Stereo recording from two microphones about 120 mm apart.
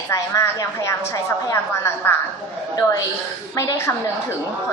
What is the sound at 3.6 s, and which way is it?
Speech, 20° left (ahead or behind).